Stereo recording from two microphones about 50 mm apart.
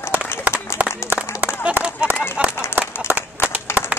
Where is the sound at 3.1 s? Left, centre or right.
Right.